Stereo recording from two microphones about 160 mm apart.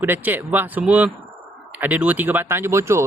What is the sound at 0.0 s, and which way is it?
Speech, 10° right (ahead or behind).